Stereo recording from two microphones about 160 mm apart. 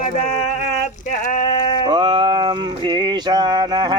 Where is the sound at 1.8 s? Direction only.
30° right (ahead or behind).